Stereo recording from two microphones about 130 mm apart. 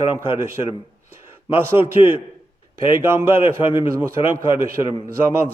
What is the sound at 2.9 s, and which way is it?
A man's voice, 20° right (ahead or behind).